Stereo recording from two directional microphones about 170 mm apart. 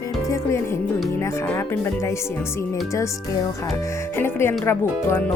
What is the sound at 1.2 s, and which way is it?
Speech, 15° left (ahead or behind).